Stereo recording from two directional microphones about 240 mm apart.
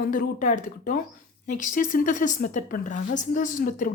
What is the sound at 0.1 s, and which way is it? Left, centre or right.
Speech, left.